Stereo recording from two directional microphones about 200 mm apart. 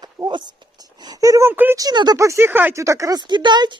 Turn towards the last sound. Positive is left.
turn(degrees=-20)  # may be behind; listen again after turning